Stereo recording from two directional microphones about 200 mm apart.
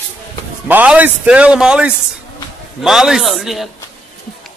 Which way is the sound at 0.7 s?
10° right (ahead or behind).